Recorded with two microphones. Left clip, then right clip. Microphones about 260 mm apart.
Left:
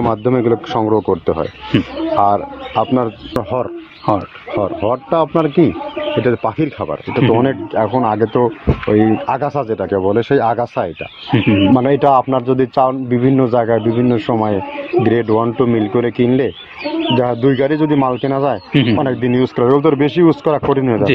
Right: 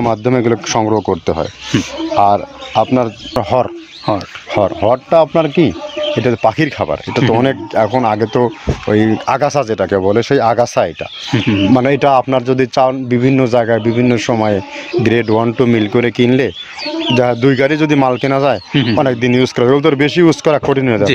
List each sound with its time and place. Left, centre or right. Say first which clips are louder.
0.0 s speech: right 1 dB; right
4.1 s speech: left 1 dB; centre
4.6 s speech: right 5 dB; right
11.3 s speech: left 1 dB; centre
11.7 s speech: right 2 dB; right
18.7 s speech: even; centre
18.9 s speech: right 3 dB; right